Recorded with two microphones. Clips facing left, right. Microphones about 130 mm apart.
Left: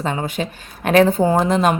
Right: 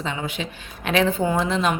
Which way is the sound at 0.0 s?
45° left (ahead or behind).